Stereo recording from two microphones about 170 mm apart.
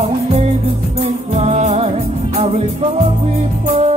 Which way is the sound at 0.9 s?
40° right (ahead or behind).